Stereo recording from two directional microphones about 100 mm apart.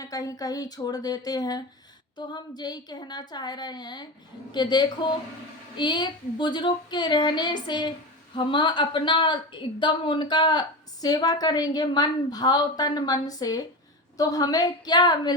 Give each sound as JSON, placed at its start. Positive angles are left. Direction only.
{"t": 0.0, "sound": "a woman's voice", "side_deg": 35}